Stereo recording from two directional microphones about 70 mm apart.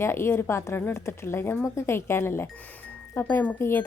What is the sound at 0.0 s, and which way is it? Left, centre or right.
Speech, left.